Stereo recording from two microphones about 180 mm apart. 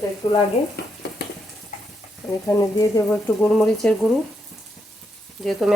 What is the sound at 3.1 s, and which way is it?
Speech, 5° left (ahead or behind).